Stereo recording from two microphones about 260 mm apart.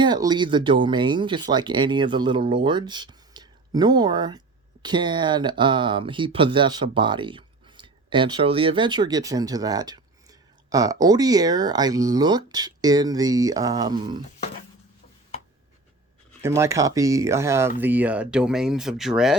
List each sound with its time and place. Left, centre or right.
0.0 s speech: centre
16.4 s speech: centre